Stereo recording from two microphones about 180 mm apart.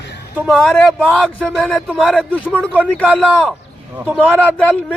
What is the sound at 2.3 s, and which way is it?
Speech, 10° left (ahead or behind).